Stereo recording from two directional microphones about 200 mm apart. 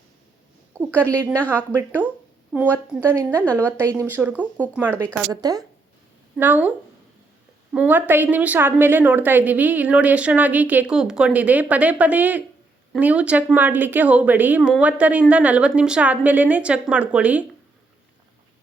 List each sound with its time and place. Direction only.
0.7 s a woman's voice: 15° right (ahead or behind)
5.3 s speech: 20° right (ahead or behind)
6.3 s a woman's voice: 10° right (ahead or behind)